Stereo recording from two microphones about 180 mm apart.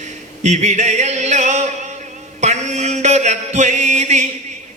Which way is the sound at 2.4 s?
40° right (ahead or behind).